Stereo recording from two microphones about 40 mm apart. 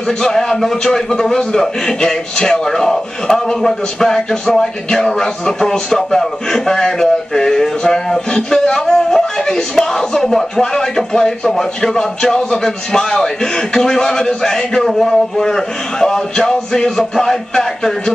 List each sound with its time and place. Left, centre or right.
0.2 s speech: centre